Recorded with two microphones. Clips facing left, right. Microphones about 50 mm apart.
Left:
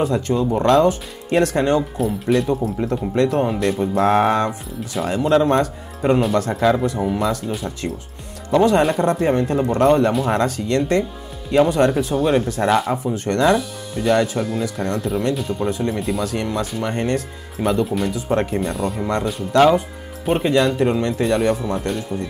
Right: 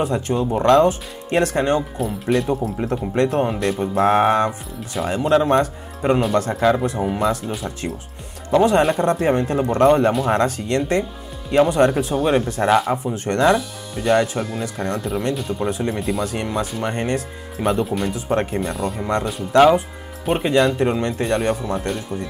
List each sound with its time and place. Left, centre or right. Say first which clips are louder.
0.3 s speech: left 2 dB; centre
0.6 s speech: right 1 dB; centre
6.9 s speech: left 1 dB; centre
7.2 s speech: even; centre